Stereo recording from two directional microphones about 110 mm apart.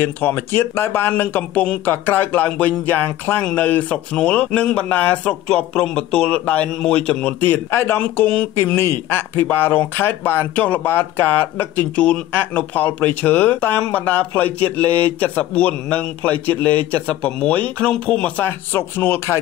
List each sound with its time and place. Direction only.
0.0 s speech: 20° left (ahead or behind)
18.7 s speech: 20° left (ahead or behind)